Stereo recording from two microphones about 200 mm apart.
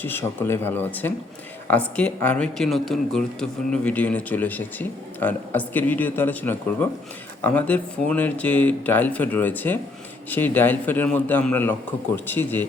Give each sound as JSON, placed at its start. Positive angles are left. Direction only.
{"t": 0.0, "sound": "a man's voice", "side_deg": 10}